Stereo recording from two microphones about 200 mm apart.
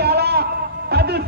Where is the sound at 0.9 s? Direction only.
55° right (ahead or behind).